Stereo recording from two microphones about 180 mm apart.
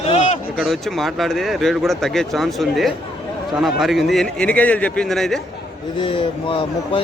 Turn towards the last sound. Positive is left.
turn(degrees=30)  # may be behind; listen again after turning